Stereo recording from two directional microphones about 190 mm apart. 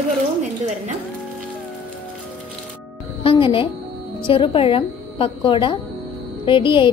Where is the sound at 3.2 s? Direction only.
30° left (ahead or behind).